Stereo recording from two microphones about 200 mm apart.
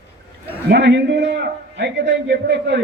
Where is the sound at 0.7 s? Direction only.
55° right (ahead or behind).